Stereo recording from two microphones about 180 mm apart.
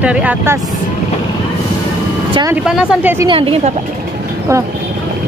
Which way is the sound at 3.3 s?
30° right (ahead or behind).